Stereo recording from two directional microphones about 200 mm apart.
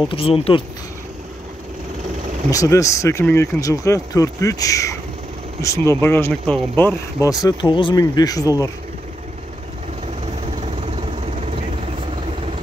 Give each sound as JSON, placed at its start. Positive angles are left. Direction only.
{"t": 0.1, "sound": "speech", "side_deg": 30}
{"t": 2.5, "sound": "speech", "side_deg": 15}